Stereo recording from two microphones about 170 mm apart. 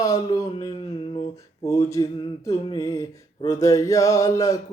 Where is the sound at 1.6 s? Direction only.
20° left (ahead or behind).